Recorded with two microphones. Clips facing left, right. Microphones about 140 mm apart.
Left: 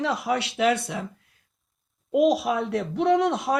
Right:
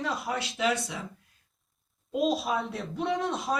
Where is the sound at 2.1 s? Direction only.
70° left (ahead or behind).